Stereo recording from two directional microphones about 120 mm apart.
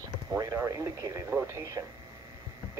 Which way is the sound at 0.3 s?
30° right (ahead or behind).